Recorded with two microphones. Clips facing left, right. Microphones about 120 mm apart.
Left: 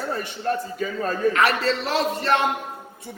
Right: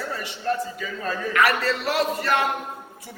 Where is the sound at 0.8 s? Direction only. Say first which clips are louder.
Left 4 dB; 40° left (ahead or behind).